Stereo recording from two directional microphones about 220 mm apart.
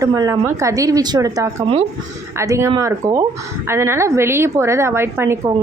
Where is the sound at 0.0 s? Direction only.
15° right (ahead or behind).